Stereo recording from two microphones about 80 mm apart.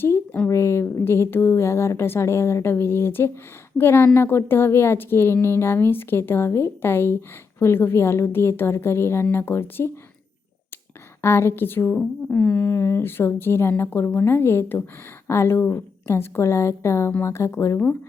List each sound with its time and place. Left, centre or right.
0.4 s a woman's voice: left
11.2 s a woman's voice: left